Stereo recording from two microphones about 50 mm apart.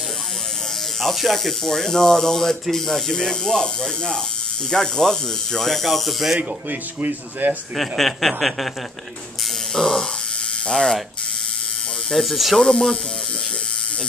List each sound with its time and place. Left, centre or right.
1.0 s speech: centre
6.7 s speech: right
7.7 s speech: centre
9.8 s speech: centre
12.1 s speech: centre
12.5 s speech: centre